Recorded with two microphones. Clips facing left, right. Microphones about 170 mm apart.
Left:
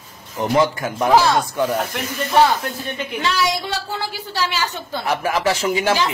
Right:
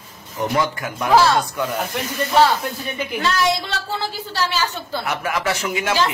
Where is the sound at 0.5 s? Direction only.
25° left (ahead or behind).